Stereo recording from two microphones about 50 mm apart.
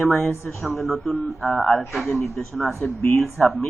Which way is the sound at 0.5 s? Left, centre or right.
Centre.